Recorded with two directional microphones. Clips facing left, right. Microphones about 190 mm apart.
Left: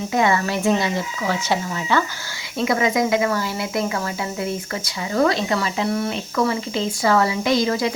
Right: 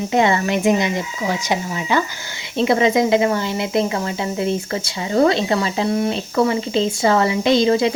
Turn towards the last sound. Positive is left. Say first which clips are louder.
# right 4 dB
turn(degrees=-25)  # may be behind; listen again after turning